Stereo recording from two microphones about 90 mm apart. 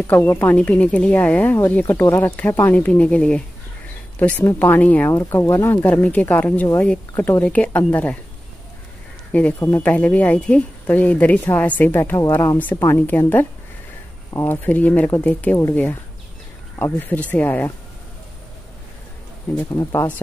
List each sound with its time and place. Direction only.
0.1 s speech: 20° left (ahead or behind)
9.3 s speech: 15° left (ahead or behind)
12.0 s speech: 30° left (ahead or behind)
12.5 s speech: 20° left (ahead or behind)
19.7 s speech: 35° left (ahead or behind)